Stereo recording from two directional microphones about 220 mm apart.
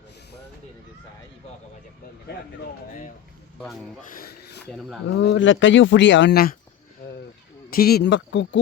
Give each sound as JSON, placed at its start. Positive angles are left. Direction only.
{"t": 4.1, "sound": "a sound", "side_deg": 40}
{"t": 5.0, "sound": "speech", "side_deg": 55}
{"t": 7.7, "sound": "speech", "side_deg": 45}